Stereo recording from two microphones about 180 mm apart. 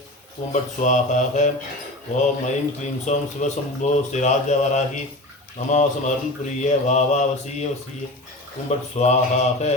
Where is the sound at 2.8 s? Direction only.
40° left (ahead or behind).